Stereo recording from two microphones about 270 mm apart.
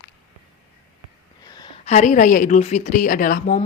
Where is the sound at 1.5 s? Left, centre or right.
Centre.